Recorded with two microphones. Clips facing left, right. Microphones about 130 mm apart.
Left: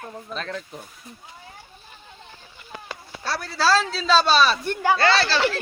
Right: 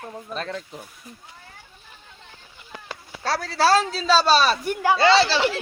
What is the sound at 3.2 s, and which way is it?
Speech, 90° right.